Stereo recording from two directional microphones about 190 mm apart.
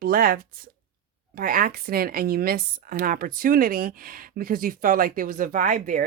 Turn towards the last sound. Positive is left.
turn(degrees=-45)  # may be behind; listen again after turning